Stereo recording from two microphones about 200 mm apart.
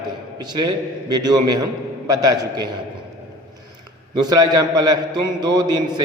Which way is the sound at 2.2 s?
20° right (ahead or behind).